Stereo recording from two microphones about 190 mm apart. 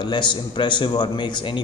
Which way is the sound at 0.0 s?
25° left (ahead or behind).